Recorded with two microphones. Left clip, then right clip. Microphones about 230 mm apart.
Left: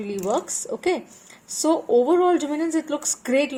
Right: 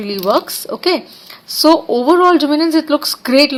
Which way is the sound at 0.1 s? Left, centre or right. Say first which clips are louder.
Right 10 dB; right.